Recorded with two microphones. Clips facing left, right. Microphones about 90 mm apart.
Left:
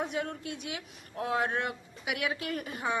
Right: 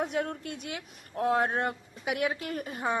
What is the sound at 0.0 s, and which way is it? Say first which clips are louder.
Speech: right 3 dB; 50° right (ahead or behind).